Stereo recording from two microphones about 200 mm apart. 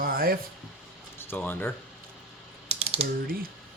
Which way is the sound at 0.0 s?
45° right (ahead or behind).